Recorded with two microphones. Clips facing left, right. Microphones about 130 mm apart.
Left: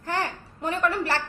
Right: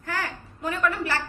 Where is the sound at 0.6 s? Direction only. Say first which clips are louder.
Left 1 dB; 30° left (ahead or behind).